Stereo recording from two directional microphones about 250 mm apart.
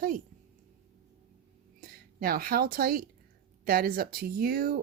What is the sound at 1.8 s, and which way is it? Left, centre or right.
Speech, right.